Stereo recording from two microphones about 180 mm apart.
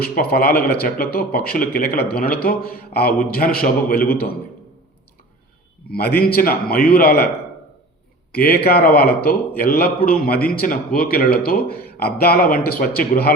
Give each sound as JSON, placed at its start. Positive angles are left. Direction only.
{"t": 0.0, "sound": "speech", "side_deg": 60}
{"t": 5.9, "sound": "speech", "side_deg": 60}
{"t": 8.3, "sound": "speech", "side_deg": 60}